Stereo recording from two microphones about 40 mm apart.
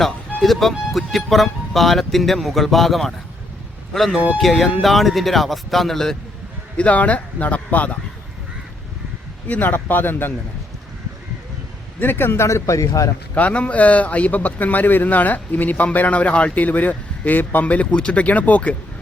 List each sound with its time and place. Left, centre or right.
0.4 s speech: centre
6.7 s speech: left
9.5 s speech: left
11.9 s speech: left
13.3 s speech: left
16.6 s a man's voice: left